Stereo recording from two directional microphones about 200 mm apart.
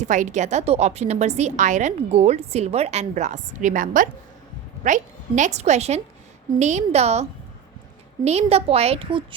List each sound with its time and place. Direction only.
0.0 s a woman's voice: 40° right (ahead or behind)